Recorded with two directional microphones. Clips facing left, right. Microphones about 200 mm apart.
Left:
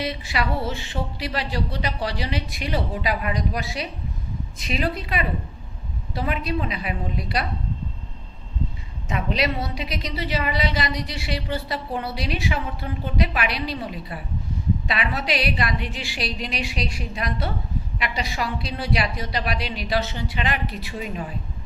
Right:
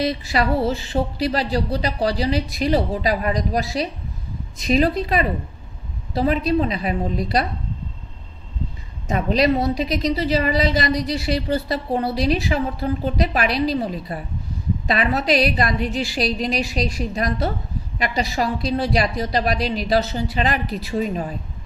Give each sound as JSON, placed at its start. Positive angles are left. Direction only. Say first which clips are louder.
{"t": 0.0, "sound": "a woman's voice", "louder": "right 6 dB", "side_deg": -40}
{"t": 9.0, "sound": "a woman's voice", "louder": "right 6 dB", "side_deg": -40}